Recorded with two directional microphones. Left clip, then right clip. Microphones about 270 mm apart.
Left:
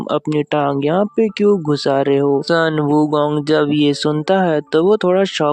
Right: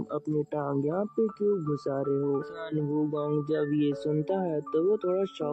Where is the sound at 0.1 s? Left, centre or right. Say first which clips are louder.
Left 14 dB; left.